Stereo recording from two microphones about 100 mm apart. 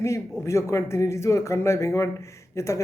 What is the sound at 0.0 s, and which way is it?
A man's voice, 30° left (ahead or behind).